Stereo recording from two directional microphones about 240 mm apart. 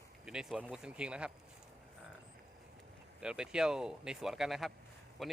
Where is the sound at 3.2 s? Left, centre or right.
Centre.